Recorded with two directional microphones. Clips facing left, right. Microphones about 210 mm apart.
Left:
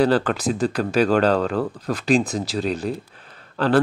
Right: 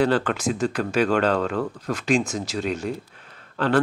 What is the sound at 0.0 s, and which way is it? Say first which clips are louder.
Speech: left 2 dB; 35° left (ahead or behind).